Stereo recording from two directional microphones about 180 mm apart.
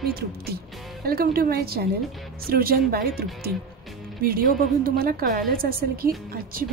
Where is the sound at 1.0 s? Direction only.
55° right (ahead or behind).